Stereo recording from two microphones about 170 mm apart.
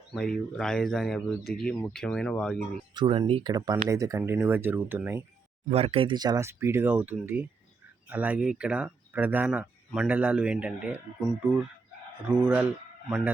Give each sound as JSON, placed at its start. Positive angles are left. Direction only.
{"t": 0.1, "sound": "speech", "side_deg": 5}
{"t": 2.9, "sound": "speech", "side_deg": -30}
{"t": 5.6, "sound": "speech", "side_deg": -40}